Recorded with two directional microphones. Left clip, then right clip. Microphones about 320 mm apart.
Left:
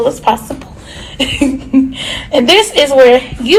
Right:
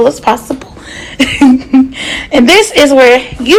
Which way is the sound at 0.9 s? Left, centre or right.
Right.